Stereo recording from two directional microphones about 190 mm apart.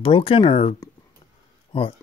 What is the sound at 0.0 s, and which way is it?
Speech, 25° left (ahead or behind).